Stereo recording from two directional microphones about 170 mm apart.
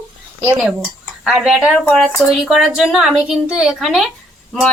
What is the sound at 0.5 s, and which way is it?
A woman's voice, 5° right (ahead or behind).